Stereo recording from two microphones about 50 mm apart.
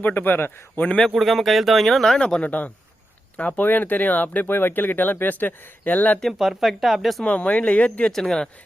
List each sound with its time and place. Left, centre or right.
0.0 s a man's voice: left
1.1 s speech: centre
2.2 s speech: left
6.4 s speech: centre
7.3 s speech: left
8.0 s speech: centre